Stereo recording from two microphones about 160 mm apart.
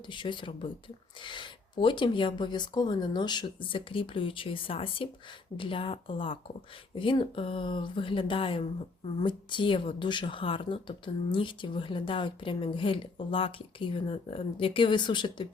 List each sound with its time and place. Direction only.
0.1 s speech: 30° left (ahead or behind)